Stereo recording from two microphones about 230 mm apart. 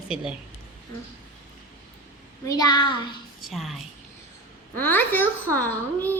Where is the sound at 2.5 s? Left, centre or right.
Centre.